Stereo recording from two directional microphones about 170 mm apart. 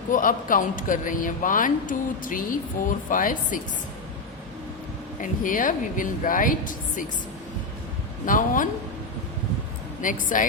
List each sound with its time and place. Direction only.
0.1 s a man's voice: 50° left (ahead or behind)
5.2 s a man's voice: 50° left (ahead or behind)
8.3 s a man's voice: 50° left (ahead or behind)
10.0 s a man's voice: 50° left (ahead or behind)